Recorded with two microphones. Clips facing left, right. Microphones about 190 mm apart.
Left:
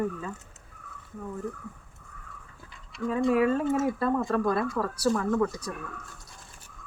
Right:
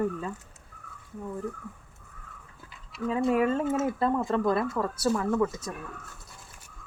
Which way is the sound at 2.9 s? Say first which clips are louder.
Left 1 dB; 5° right (ahead or behind).